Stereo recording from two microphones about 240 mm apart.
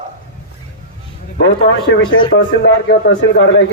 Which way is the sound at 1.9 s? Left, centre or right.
Left.